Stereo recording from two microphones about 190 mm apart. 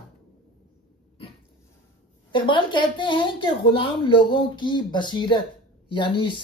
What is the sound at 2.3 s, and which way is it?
Speech, 25° left (ahead or behind).